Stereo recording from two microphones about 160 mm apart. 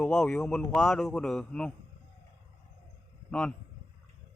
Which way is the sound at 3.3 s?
5° left (ahead or behind).